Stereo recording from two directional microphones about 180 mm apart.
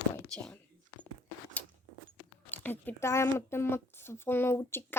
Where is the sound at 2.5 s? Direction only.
10° left (ahead or behind).